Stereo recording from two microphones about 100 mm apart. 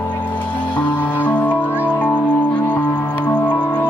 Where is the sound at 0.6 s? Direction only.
15° left (ahead or behind).